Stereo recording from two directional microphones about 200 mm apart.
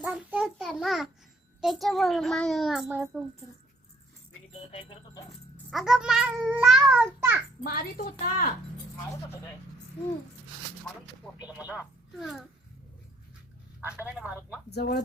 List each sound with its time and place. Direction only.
0.0 s a sound: 5° right (ahead or behind)
1.6 s a child's voice: centre (ahead or behind)
4.7 s speech: 25° left (ahead or behind)
5.7 s a child's voice: 5° right (ahead or behind)
7.6 s a woman's voice: 45° left (ahead or behind)
11.4 s speech: 5° right (ahead or behind)
13.8 s a child's voice: 5° right (ahead or behind)
14.7 s a woman's voice: 55° left (ahead or behind)